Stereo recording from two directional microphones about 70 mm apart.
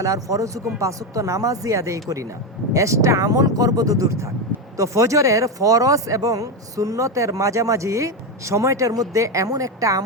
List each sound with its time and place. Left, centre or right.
0.0 s speech: right